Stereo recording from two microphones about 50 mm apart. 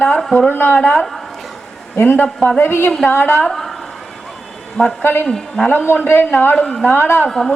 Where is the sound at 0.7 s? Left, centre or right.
Centre.